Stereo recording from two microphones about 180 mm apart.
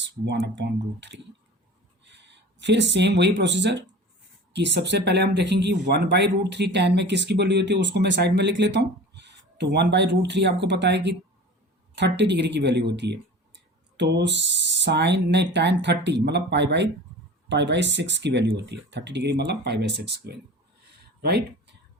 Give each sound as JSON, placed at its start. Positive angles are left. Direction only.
{"t": 0.0, "sound": "speech", "side_deg": -70}